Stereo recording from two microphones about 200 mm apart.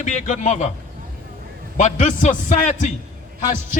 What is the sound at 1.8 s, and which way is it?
A man's voice, 35° left (ahead or behind).